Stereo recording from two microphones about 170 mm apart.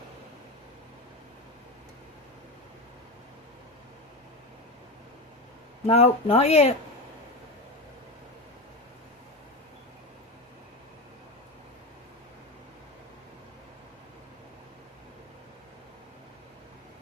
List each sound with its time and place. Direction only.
5.8 s speech: 35° left (ahead or behind)